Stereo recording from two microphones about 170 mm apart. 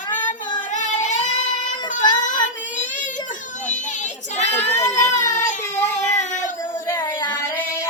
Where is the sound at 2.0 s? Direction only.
25° left (ahead or behind).